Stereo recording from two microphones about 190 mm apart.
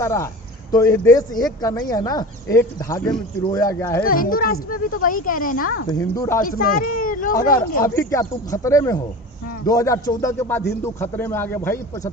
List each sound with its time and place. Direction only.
0.0 s speech: 15° left (ahead or behind)
4.0 s speech: 50° left (ahead or behind)
5.9 s speech: 15° left (ahead or behind)
6.4 s speech: 50° left (ahead or behind)
7.9 s speech: 15° left (ahead or behind)